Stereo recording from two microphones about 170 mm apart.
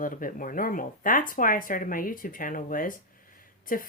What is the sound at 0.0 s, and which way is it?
Speech, 55° left (ahead or behind).